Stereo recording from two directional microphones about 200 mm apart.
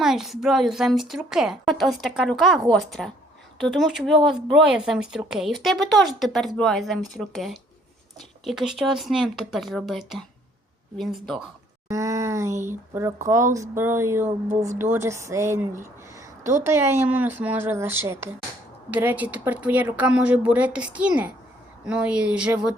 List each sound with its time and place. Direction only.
0.0 s a woman's voice: centre (ahead or behind)
11.9 s a woman's voice: 15° right (ahead or behind)